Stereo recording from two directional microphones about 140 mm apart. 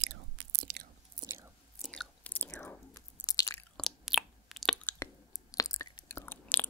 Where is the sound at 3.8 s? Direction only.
Centre (ahead or behind).